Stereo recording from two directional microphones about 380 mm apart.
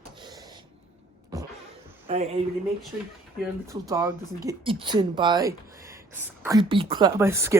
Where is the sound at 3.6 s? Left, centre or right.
Centre.